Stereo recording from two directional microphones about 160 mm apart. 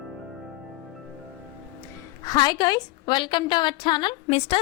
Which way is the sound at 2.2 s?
25° left (ahead or behind).